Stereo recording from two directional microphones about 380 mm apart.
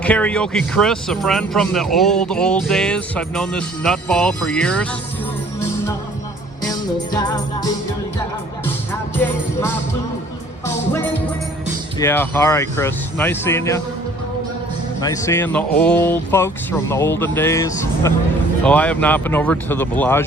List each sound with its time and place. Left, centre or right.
0.0 s speech: centre
6.6 s music: centre
11.9 s speech: centre
15.0 s speech: centre